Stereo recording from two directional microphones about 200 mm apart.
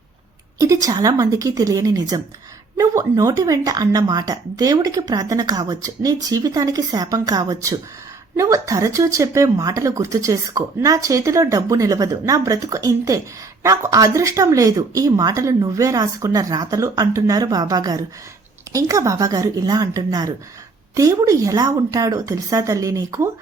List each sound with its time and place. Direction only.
0.6 s speech: 15° right (ahead or behind)